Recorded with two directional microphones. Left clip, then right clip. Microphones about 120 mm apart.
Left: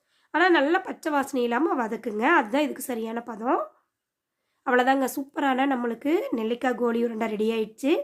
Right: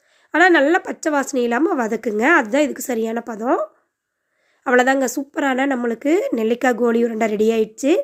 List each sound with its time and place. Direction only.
0.3 s speech: 40° right (ahead or behind)